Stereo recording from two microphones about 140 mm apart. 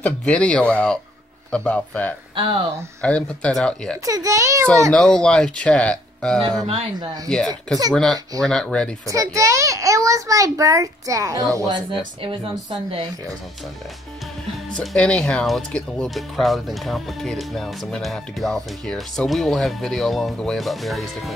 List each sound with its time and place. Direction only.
0.0 s speech: 10° left (ahead or behind)
2.3 s speech: 40° right (ahead or behind)
3.0 s speech: 10° left (ahead or behind)
4.0 s a child's voice: 25° right (ahead or behind)
4.9 s speech: 5° left (ahead or behind)
7.9 s speech: 5° left (ahead or behind)
9.0 s a child's voice: 25° right (ahead or behind)
12.0 s speech: 35° right (ahead or behind)
14.7 s speech: 5° left (ahead or behind)